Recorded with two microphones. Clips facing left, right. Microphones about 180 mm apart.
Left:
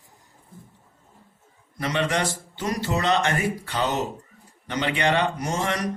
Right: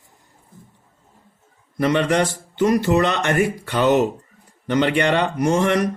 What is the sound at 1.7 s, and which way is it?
Speech, 60° right (ahead or behind).